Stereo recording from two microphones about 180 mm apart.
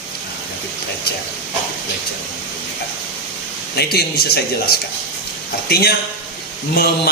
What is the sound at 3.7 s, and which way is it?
A man's voice, 60° left (ahead or behind).